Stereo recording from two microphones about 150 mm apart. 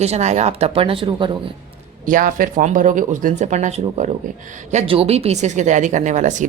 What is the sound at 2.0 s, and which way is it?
Speech, 65° right (ahead or behind).